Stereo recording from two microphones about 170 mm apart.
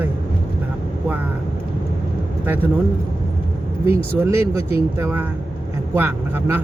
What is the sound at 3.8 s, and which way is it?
Speech, 15° right (ahead or behind).